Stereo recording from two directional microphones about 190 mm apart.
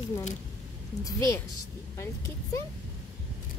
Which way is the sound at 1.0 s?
15° left (ahead or behind).